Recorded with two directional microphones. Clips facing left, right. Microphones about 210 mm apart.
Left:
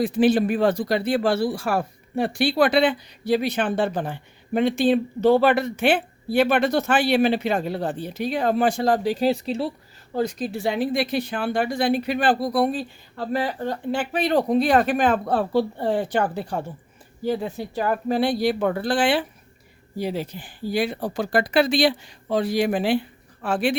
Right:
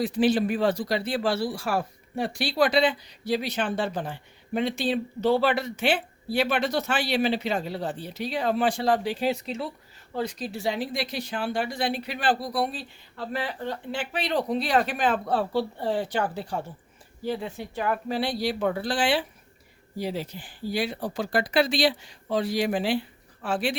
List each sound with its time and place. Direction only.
0.0 s speech: 55° left (ahead or behind)
17.2 s speech: 45° left (ahead or behind)